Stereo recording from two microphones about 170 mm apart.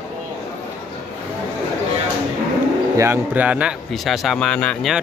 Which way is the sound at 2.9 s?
15° right (ahead or behind).